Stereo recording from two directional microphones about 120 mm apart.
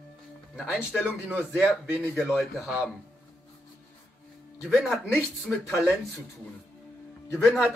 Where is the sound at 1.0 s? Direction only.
10° right (ahead or behind).